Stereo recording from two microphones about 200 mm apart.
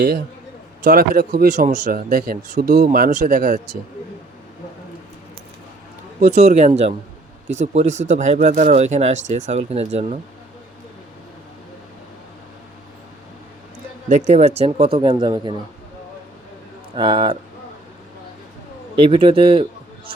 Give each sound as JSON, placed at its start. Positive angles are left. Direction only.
{"t": 0.9, "sound": "speech", "side_deg": -45}
{"t": 6.1, "sound": "speech", "side_deg": -35}
{"t": 14.1, "sound": "speech", "side_deg": -35}
{"t": 16.9, "sound": "speech", "side_deg": -25}
{"t": 18.9, "sound": "speech", "side_deg": -30}